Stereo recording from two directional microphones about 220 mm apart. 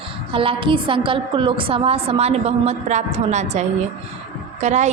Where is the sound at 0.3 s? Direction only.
25° right (ahead or behind).